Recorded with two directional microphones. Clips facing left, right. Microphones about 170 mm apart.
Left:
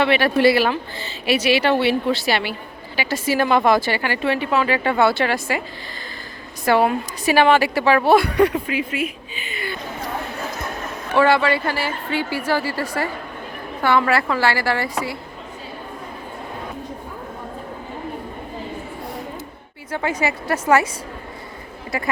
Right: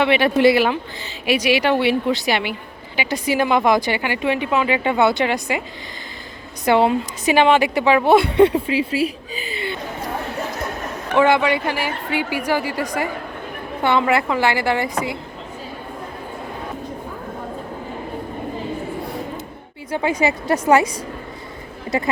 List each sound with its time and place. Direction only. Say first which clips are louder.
0.0 s speech: right 1 dB; 15° right (ahead or behind)
6.7 s a woman's voice: right 1 dB; 20° right (ahead or behind)
11.1 s a woman's voice: right 1 dB; 20° right (ahead or behind)
19.9 s speech: right 3 dB; 15° right (ahead or behind)
21.9 s a woman's voice: right 5 dB; 25° right (ahead or behind)